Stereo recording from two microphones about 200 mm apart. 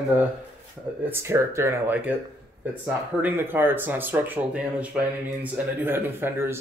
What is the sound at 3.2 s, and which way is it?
Speech, 10° right (ahead or behind).